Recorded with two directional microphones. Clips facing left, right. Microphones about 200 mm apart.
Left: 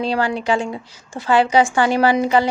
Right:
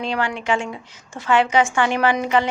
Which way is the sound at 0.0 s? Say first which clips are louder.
Left 4 dB; 35° left (ahead or behind).